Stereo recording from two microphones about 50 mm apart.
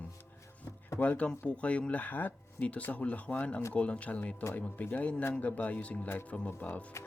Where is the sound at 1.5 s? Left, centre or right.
Left.